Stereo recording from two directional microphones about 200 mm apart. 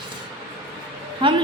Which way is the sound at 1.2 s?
25° right (ahead or behind).